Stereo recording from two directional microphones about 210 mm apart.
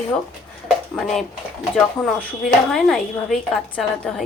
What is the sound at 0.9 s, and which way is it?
Speech, centre (ahead or behind).